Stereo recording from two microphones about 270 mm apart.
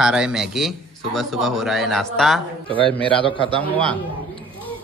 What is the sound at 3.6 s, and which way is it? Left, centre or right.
Speech, centre.